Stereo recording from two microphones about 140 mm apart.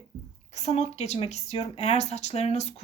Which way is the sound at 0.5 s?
55° left (ahead or behind).